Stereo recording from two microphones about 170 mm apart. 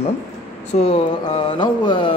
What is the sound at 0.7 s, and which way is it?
Speech, 35° left (ahead or behind).